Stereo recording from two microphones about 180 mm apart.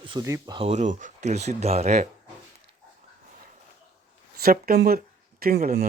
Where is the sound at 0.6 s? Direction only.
40° right (ahead or behind).